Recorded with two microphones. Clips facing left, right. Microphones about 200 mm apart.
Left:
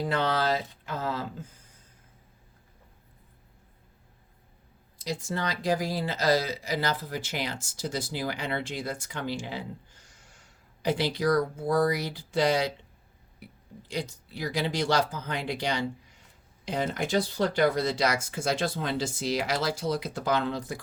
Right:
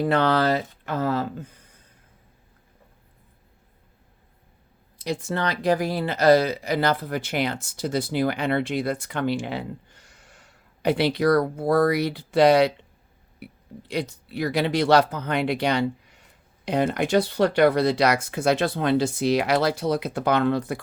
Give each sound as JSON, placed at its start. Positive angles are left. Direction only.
{"t": 0.0, "sound": "speech", "side_deg": -65}
{"t": 4.9, "sound": "speech", "side_deg": -60}